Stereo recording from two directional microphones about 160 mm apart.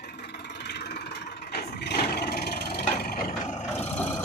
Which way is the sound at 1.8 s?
85° left.